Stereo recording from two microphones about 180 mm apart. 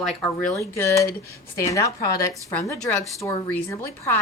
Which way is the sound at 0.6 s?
15° left (ahead or behind).